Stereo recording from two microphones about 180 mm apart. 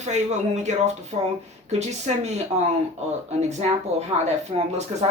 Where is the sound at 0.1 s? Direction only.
40° right (ahead or behind).